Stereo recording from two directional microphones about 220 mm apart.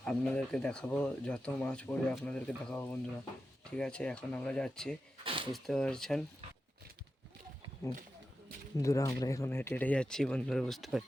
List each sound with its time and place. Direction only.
0.0 s speech: 5° left (ahead or behind)
5.2 s a sound: 25° right (ahead or behind)
5.5 s speech: centre (ahead or behind)
8.8 s speech: 15° left (ahead or behind)